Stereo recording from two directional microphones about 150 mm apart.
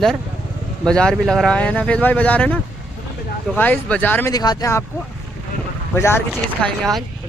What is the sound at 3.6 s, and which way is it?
Speech, 10° left (ahead or behind).